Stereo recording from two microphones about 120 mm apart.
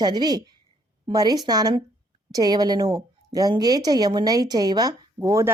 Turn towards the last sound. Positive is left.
turn(degrees=-25)  # may be behind; listen again after turning